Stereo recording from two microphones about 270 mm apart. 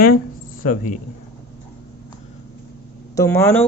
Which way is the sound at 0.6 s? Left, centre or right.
Left.